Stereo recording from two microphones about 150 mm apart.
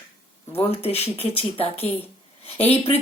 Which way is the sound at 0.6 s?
40° left (ahead or behind).